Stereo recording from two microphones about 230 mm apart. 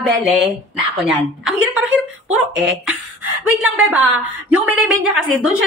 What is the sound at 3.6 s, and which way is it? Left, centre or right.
A woman's voice, centre.